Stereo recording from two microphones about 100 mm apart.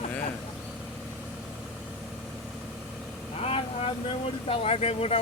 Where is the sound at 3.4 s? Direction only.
85° left.